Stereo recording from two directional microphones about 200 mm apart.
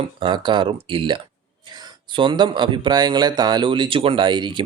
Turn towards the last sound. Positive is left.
turn(degrees=-25)  # may be behind; listen again after turning